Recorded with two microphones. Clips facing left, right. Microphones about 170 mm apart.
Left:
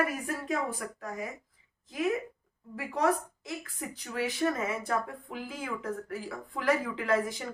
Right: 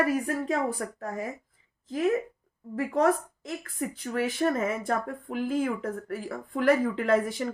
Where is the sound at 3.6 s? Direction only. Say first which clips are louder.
Right 7 dB; 50° right (ahead or behind).